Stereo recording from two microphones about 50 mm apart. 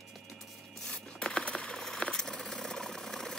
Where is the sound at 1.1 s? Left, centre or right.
Left.